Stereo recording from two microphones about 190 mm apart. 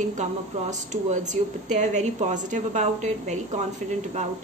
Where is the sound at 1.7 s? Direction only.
40° right (ahead or behind).